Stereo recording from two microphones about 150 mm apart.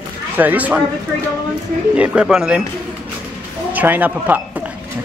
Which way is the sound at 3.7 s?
10° right (ahead or behind).